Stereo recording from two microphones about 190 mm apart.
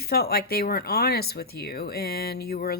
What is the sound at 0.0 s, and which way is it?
Speech, 55° left (ahead or behind).